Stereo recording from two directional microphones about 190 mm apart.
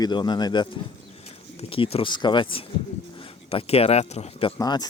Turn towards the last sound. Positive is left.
turn(degrees=20)  # may be behind; listen again after turning